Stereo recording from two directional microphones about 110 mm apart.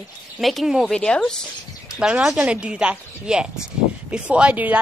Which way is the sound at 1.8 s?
10° right (ahead or behind).